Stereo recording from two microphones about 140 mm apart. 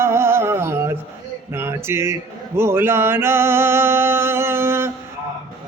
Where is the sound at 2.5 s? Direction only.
15° right (ahead or behind).